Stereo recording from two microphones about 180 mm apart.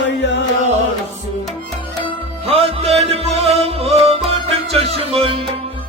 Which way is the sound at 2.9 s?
35° right (ahead or behind).